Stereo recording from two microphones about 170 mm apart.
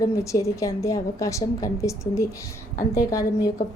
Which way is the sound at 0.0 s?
20° left (ahead or behind).